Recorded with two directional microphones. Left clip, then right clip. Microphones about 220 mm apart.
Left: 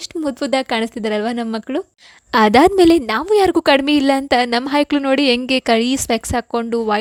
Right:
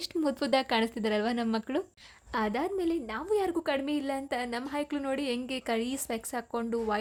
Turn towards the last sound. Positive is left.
turn(degrees=35)  # may be behind; listen again after turning